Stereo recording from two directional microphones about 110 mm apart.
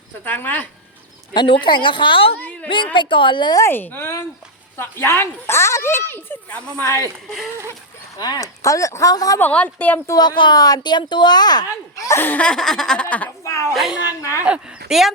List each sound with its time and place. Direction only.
0.3 s a woman's voice: 15° left (ahead or behind)
1.3 s a woman's voice: 45° left (ahead or behind)
3.6 s speech: 20° left (ahead or behind)
6.7 s speech: 30° left (ahead or behind)
8.2 s speech: 35° left (ahead or behind)
9.4 s a woman's voice: 15° left (ahead or behind)
10.1 s speech: 40° left (ahead or behind); by 13.3 s 15° left (ahead or behind)
13.4 s a sound: 25° left (ahead or behind)
13.7 s speech: 5° right (ahead or behind)
14.2 s speech: 30° left (ahead or behind)
14.4 s speech: 10° right (ahead or behind)